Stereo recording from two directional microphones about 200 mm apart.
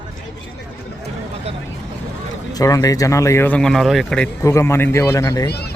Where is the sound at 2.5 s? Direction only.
20° left (ahead or behind).